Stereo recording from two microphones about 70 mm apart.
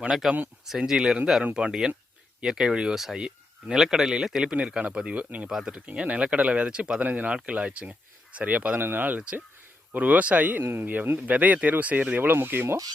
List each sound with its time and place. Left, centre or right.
0.0 s speech: centre
5.5 s speech: centre
10.6 s speech: right